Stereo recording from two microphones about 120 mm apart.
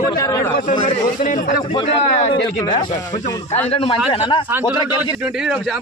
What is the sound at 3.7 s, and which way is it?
Speech, 55° left (ahead or behind).